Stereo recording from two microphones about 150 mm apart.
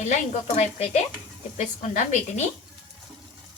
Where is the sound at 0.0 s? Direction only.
50° left (ahead or behind).